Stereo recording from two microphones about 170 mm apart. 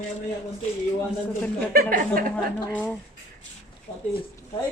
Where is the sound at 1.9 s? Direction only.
55° right (ahead or behind).